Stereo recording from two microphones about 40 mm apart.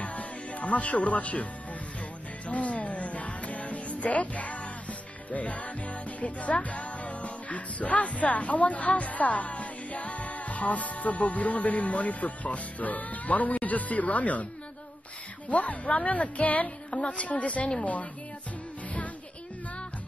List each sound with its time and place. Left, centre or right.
0.0 s music: left
15.5 s music: left